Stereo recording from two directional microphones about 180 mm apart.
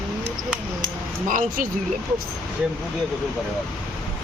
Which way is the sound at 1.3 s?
50° right (ahead or behind).